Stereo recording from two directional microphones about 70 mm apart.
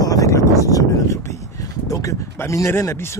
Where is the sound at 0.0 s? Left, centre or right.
Left.